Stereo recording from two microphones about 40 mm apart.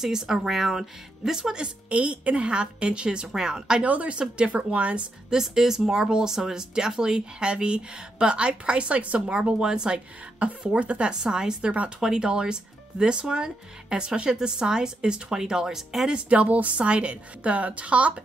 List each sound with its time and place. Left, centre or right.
0.0 s speech: centre
1.9 s speech: right
3.8 s a woman's voice: right
5.3 s speech: centre; by 9.3 s right
9.3 s speech: right
11.1 s speech: centre
16.1 s a woman's voice: right